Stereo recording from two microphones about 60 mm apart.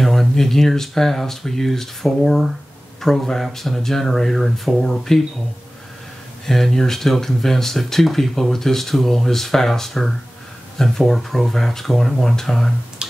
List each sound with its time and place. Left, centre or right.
0.0 s speech: centre
6.4 s speech: centre